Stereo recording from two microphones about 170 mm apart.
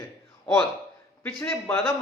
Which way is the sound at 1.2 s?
10° left (ahead or behind).